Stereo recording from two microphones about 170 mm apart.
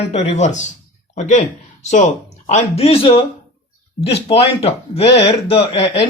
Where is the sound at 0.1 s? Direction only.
40° left (ahead or behind).